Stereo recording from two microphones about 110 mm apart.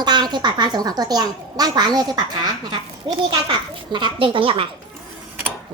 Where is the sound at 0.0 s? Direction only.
40° right (ahead or behind).